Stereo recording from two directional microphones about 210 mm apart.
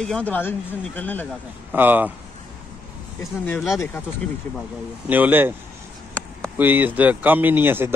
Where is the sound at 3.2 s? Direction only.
15° left (ahead or behind).